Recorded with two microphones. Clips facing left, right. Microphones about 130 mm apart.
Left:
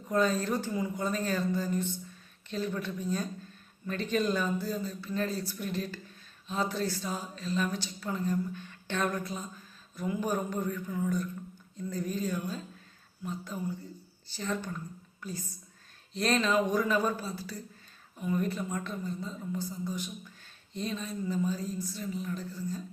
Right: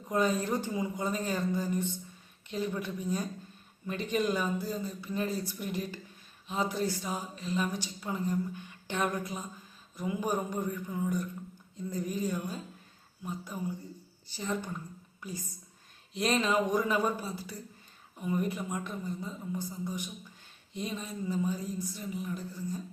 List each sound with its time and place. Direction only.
0.1 s a woman's voice: 15° right (ahead or behind)